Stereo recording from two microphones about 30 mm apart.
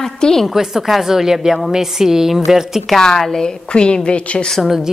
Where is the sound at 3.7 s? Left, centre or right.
Left.